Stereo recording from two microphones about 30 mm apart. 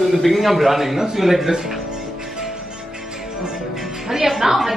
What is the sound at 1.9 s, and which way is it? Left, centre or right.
Music, right.